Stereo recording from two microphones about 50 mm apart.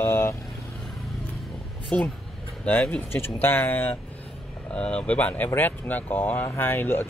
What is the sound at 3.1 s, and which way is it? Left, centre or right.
Speech, left.